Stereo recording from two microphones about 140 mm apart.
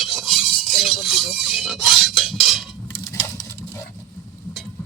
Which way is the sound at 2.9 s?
25° left (ahead or behind).